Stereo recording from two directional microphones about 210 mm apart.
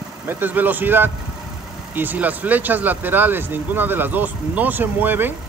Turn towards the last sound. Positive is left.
turn(degrees=-10)  # may be behind; listen again after turning